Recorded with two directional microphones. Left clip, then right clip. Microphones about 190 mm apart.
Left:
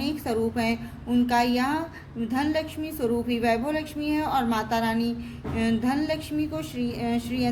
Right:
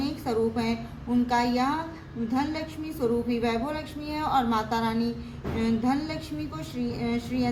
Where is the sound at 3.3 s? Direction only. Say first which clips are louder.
Left 3 dB; 35° left (ahead or behind).